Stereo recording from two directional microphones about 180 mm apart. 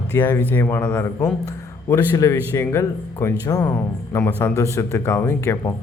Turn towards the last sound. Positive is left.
turn(degrees=15)  # may be behind; listen again after turning